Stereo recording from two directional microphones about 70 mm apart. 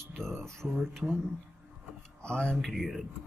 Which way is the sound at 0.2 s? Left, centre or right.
Centre.